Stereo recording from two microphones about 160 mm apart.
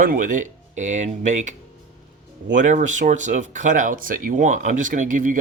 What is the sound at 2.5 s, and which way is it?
Speech, 50° right (ahead or behind).